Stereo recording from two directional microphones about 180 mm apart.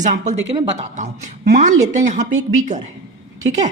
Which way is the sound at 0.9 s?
45° right (ahead or behind).